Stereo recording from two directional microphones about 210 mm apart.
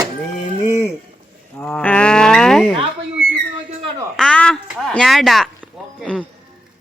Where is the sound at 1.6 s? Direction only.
5° left (ahead or behind).